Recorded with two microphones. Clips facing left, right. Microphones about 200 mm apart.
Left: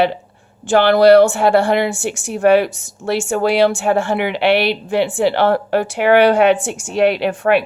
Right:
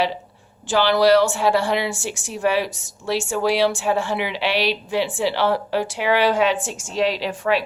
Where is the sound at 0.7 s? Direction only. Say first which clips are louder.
Left 6 dB; 55° left (ahead or behind).